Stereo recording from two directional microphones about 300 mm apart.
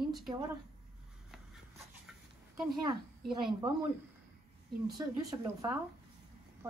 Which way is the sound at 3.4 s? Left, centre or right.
Centre.